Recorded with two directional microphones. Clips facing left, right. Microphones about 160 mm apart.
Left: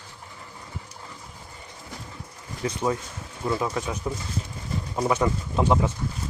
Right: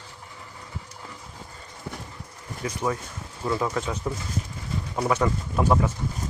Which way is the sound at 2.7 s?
20° left (ahead or behind).